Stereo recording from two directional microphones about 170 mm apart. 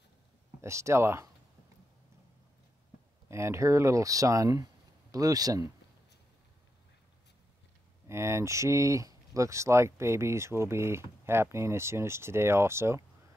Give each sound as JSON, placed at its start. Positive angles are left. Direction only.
{"t": 0.6, "sound": "speech", "side_deg": -15}
{"t": 3.3, "sound": "speech", "side_deg": -15}
{"t": 8.1, "sound": "speech", "side_deg": -15}